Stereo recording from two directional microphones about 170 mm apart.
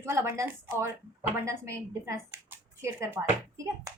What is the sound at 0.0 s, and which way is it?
Speech, 15° right (ahead or behind).